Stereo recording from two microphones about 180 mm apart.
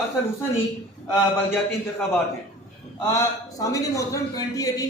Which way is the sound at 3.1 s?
20° left (ahead or behind).